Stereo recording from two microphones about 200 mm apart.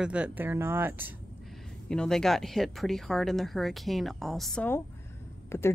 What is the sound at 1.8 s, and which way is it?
Speech, 5° left (ahead or behind).